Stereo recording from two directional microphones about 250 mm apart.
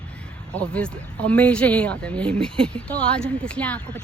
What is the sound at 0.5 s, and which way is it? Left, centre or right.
Speech, centre.